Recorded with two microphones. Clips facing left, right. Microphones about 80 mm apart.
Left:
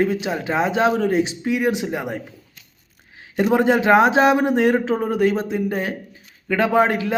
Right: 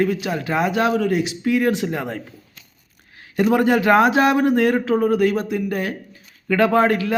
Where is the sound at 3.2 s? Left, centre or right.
Left.